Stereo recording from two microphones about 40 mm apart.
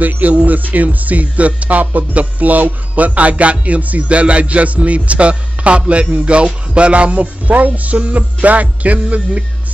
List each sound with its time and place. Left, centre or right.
0.0 s speech: right